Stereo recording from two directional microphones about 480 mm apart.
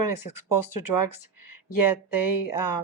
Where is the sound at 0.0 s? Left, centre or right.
Left.